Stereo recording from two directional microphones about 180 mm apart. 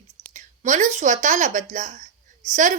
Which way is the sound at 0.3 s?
45° right (ahead or behind).